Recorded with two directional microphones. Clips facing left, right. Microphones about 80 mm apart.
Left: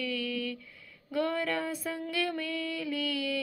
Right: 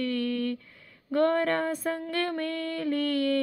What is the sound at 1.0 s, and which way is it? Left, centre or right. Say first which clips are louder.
Female singing: right 6 dB; right.